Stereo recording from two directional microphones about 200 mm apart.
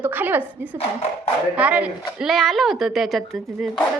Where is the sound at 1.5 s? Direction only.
5° right (ahead or behind).